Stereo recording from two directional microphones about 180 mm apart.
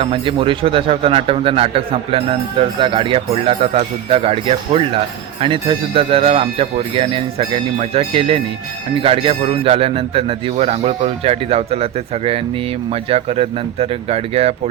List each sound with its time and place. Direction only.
0.0 s a man's voice: 30° right (ahead or behind)